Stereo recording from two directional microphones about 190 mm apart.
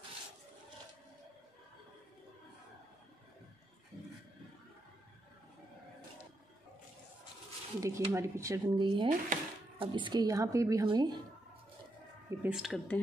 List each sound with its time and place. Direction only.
7.8 s speech: 15° right (ahead or behind)
12.3 s speech: 5° right (ahead or behind)